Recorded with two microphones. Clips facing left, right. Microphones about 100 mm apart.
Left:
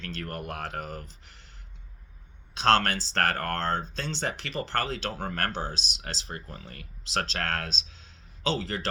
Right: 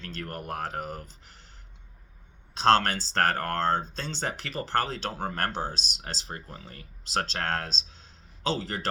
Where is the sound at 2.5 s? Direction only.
35° right (ahead or behind).